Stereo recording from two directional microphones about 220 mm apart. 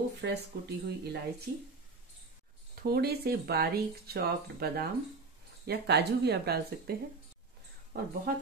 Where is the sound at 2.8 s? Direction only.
45° right (ahead or behind).